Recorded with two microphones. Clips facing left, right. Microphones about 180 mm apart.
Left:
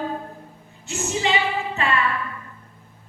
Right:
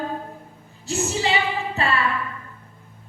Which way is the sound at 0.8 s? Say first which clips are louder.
Right 3 dB; 35° right (ahead or behind).